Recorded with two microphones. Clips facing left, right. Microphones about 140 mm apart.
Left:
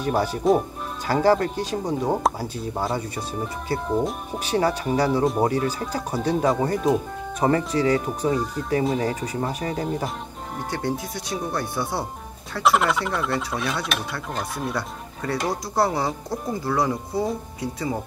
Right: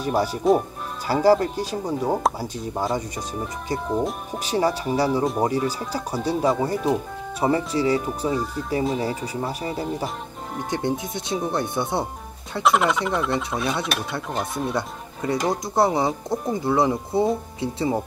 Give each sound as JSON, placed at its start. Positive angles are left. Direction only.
{"t": 0.0, "sound": "speech", "side_deg": -10}
{"t": 0.4, "sound": "speech", "side_deg": 0}
{"t": 1.0, "sound": "speech", "side_deg": -10}
{"t": 3.2, "sound": "speech", "side_deg": -15}
{"t": 3.8, "sound": "speech", "side_deg": 0}
{"t": 4.5, "sound": "speech", "side_deg": -10}
{"t": 10.7, "sound": "speech", "side_deg": -20}
{"t": 12.6, "sound": "speech", "side_deg": 0}
{"t": 14.7, "sound": "speech", "side_deg": -20}